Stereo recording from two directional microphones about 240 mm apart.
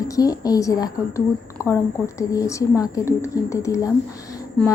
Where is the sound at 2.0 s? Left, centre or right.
Centre.